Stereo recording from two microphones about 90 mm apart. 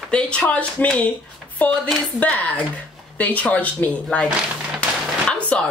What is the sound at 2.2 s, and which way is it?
A woman's voice, 15° left (ahead or behind).